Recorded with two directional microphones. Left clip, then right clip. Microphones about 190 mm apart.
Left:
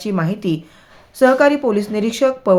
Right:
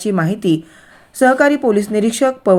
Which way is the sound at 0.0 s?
20° right (ahead or behind).